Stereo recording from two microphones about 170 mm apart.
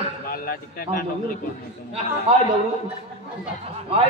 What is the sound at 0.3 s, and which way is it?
Speech, 60° left (ahead or behind).